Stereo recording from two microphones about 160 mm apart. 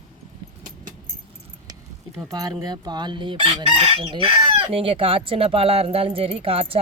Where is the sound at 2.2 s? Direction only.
20° right (ahead or behind).